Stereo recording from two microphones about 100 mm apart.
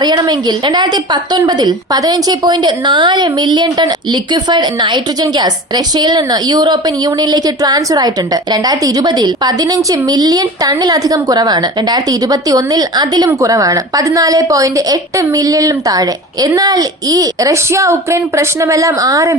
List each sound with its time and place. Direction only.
0.0 s a woman's voice: 45° right (ahead or behind)